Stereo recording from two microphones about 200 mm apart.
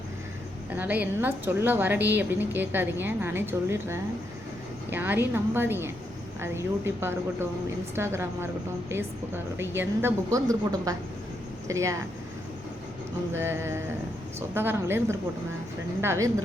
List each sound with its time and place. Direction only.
0.7 s a woman's voice: 10° right (ahead or behind)
13.3 s a woman's voice: 10° right (ahead or behind)